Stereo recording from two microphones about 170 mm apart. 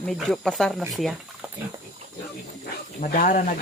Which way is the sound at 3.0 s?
50° left (ahead or behind).